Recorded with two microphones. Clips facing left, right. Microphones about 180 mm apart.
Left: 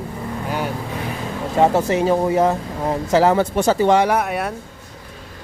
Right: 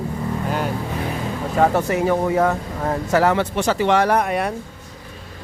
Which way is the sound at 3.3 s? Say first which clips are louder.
Left 3 dB; 40° left (ahead or behind).